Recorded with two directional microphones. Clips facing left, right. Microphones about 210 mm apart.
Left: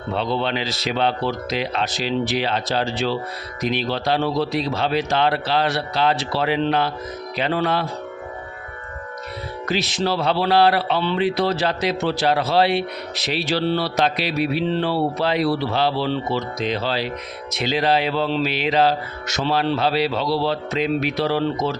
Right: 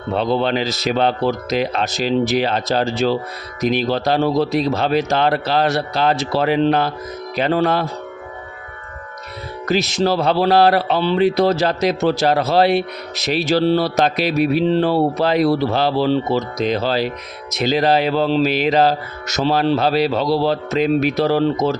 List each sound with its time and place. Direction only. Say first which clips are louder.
0.1 s speech: right 5 dB; 45° right (ahead or behind)
9.6 s speech: right 5 dB; 45° right (ahead or behind)